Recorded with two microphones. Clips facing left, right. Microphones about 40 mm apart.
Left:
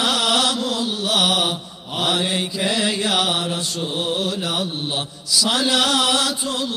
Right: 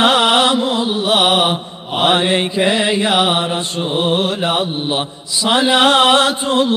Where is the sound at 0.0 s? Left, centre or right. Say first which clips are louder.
Right 7 dB; right.